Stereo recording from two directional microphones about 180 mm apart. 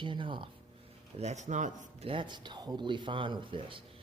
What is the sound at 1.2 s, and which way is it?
Speech, 40° right (ahead or behind).